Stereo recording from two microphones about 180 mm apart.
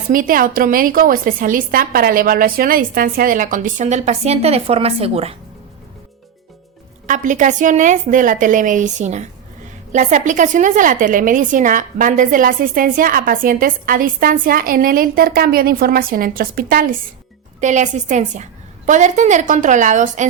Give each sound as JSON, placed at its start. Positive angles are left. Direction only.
{"t": 0.1, "sound": "a woman's voice", "side_deg": -50}
{"t": 7.1, "sound": "a woman's voice", "side_deg": -45}
{"t": 17.6, "sound": "a woman's voice", "side_deg": -40}